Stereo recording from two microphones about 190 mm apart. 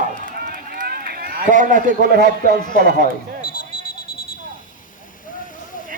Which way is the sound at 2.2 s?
50° right (ahead or behind).